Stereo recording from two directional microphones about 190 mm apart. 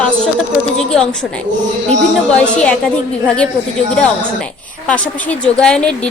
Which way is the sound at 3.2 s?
5° left (ahead or behind).